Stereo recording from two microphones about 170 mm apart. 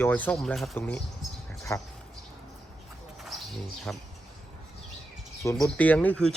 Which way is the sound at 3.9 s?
5° left (ahead or behind).